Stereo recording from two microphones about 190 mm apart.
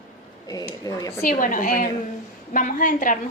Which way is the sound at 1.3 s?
45° left (ahead or behind).